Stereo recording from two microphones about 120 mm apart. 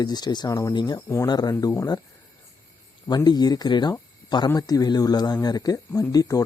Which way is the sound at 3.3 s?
35° left (ahead or behind).